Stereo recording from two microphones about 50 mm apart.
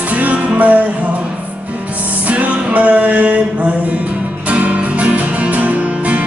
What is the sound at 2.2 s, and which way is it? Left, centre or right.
Music, right.